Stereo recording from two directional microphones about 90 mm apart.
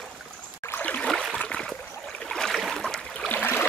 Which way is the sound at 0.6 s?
20° left (ahead or behind).